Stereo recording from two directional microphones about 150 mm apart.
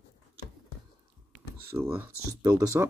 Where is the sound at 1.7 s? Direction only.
15° right (ahead or behind).